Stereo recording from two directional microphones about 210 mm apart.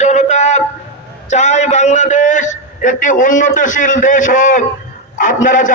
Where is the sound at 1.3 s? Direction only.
35° left (ahead or behind).